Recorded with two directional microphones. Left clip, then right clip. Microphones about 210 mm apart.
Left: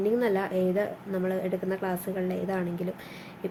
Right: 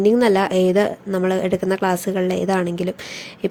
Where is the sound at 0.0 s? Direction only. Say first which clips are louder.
Right 10 dB; 50° right (ahead or behind).